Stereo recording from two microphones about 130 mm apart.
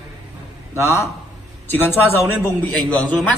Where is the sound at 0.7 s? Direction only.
20° left (ahead or behind).